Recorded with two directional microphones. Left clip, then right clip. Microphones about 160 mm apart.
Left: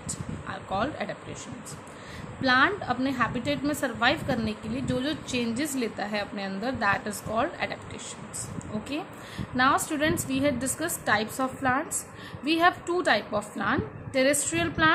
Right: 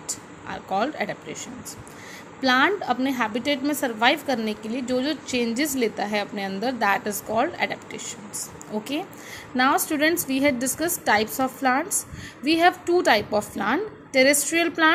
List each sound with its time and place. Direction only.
0.5 s a woman's voice: 20° right (ahead or behind)
2.4 s a woman's voice: 20° right (ahead or behind)
9.6 s a woman's voice: 20° right (ahead or behind)